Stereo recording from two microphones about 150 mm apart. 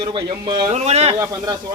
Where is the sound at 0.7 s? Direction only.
45° right (ahead or behind).